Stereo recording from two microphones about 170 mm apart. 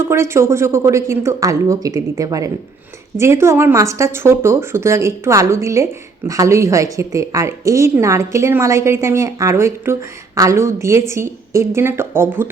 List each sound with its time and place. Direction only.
0.0 s speech: 15° right (ahead or behind)